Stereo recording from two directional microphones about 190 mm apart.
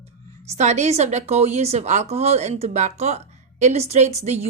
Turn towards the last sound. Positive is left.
turn(degrees=-35)  # may be behind; listen again after turning